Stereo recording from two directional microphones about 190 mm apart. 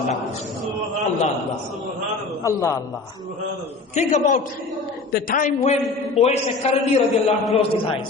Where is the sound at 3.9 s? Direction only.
40° left (ahead or behind).